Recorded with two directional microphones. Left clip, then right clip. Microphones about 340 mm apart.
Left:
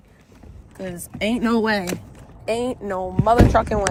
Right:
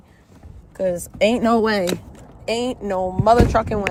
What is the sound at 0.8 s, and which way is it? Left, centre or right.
Speech, centre.